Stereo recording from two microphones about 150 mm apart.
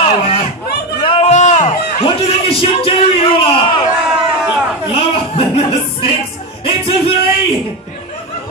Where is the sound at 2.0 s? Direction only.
40° left (ahead or behind).